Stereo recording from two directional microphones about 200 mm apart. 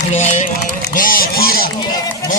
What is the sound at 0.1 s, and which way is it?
Run, 35° left (ahead or behind).